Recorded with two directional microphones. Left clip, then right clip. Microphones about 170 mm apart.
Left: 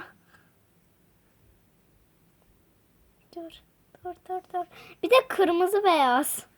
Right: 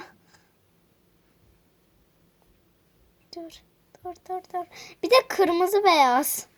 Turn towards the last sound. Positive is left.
turn(degrees=40)  # may be behind; listen again after turning